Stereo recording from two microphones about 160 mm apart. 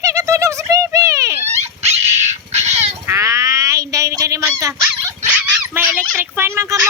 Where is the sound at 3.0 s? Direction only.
20° right (ahead or behind).